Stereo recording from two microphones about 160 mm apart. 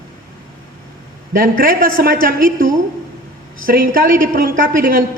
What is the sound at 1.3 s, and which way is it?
A woman's voice, 65° right (ahead or behind).